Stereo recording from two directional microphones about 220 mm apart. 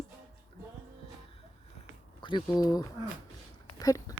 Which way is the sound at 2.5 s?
15° left (ahead or behind).